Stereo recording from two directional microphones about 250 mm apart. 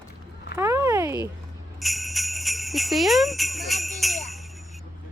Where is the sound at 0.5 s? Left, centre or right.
Centre.